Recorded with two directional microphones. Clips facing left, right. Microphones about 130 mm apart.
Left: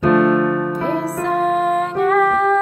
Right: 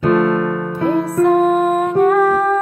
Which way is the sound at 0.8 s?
10° right (ahead or behind).